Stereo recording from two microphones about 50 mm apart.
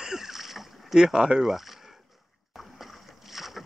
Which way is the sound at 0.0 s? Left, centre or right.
Centre.